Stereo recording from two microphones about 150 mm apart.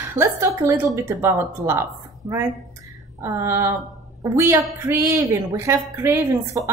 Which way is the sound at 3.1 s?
15° right (ahead or behind).